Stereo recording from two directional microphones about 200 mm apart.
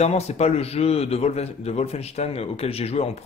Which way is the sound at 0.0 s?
30° left (ahead or behind).